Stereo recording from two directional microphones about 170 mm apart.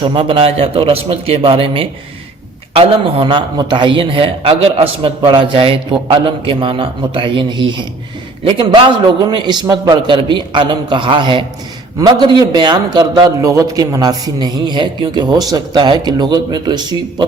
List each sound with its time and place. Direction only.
0.0 s a man's voice: 30° right (ahead or behind)